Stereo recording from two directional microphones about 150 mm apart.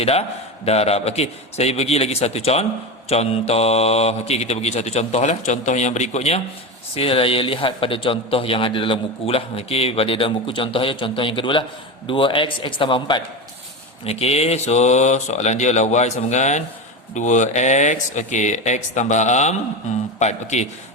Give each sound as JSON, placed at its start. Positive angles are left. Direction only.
{"t": 0.0, "sound": "speech", "side_deg": 40}